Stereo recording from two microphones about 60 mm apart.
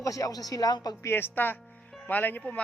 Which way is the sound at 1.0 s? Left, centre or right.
Left.